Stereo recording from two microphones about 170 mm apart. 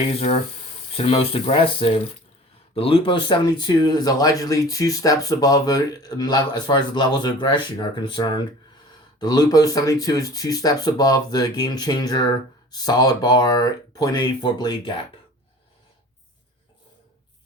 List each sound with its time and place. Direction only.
0.1 s speech: 35° left (ahead or behind)